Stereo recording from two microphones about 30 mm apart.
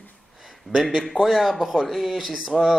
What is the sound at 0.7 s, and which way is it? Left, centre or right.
A man's voice, centre.